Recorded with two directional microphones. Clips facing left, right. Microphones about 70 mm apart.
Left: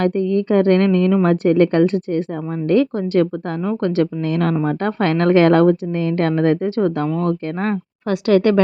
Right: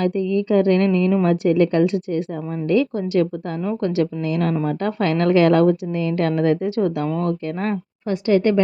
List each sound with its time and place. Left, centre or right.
0.0 s a woman's voice: left
8.1 s a woman's voice: left